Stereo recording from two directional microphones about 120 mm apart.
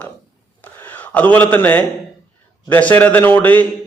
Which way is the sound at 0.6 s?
15° left (ahead or behind).